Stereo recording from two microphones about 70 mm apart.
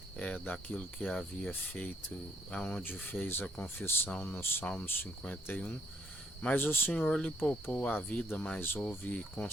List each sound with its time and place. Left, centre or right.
0.2 s speech: left
2.5 s cricket: centre
3.0 s speech: left
4.6 s speech: centre
6.9 s speech: centre